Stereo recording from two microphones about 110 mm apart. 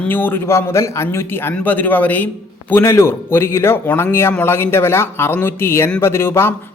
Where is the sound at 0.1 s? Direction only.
20° left (ahead or behind).